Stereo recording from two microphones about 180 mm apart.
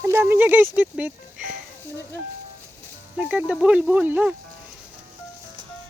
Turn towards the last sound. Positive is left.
turn(degrees=-10)  # may be behind; listen again after turning